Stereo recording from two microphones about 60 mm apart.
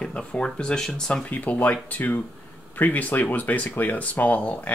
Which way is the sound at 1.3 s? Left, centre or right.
Left.